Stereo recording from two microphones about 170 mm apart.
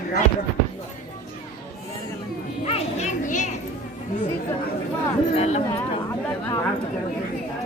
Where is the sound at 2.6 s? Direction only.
40° left (ahead or behind).